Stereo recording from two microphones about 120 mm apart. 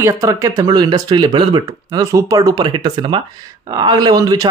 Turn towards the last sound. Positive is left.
turn(degrees=-30)  # may be behind; listen again after turning